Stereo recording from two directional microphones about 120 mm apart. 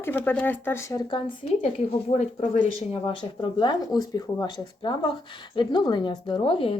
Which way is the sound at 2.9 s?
45° left (ahead or behind).